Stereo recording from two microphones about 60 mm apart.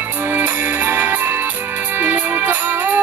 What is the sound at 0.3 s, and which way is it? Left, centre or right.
Music, right.